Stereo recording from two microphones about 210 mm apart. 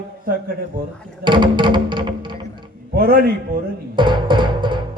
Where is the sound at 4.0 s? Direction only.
20° right (ahead or behind).